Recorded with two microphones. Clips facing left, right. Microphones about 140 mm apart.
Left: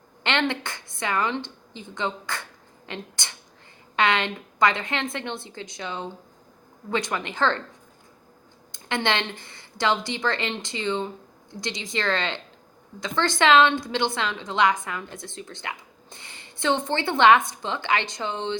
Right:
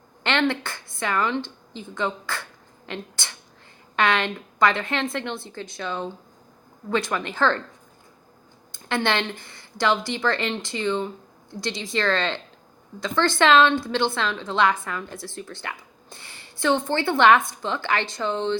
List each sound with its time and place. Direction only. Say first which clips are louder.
0.2 s a woman's voice: right 2 dB; 20° left (ahead or behind)
8.7 s a woman's voice: right 2 dB; 20° left (ahead or behind)